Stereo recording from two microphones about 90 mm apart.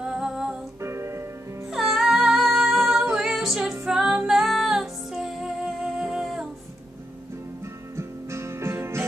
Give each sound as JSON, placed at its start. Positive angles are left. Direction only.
{"t": 0.0, "sound": "music", "side_deg": -5}
{"t": 0.7, "sound": "music", "side_deg": -30}
{"t": 1.7, "sound": "music", "side_deg": -5}
{"t": 7.9, "sound": "music", "side_deg": -30}